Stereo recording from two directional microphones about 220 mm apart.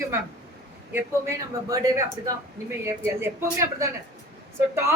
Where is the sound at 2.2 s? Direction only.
15° right (ahead or behind).